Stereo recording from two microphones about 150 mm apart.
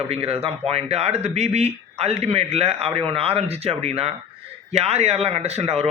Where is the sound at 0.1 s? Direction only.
40° right (ahead or behind).